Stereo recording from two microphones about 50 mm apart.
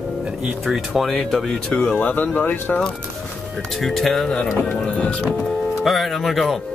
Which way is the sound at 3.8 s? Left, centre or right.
Centre.